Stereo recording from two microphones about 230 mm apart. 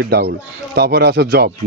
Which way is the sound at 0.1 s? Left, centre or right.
Right.